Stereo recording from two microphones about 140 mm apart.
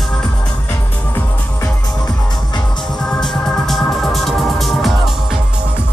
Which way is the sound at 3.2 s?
Centre (ahead or behind).